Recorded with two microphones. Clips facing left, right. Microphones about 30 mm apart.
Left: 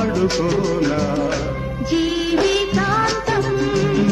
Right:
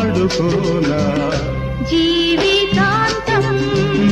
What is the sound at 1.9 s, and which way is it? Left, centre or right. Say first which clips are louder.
Music: right 4 dB; right.